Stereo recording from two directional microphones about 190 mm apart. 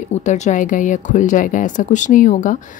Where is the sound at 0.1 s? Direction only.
40° left (ahead or behind).